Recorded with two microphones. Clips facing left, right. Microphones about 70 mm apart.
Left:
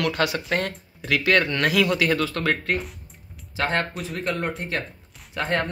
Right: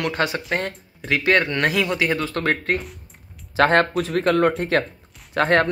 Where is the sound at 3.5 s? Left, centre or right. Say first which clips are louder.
Right 8 dB; right.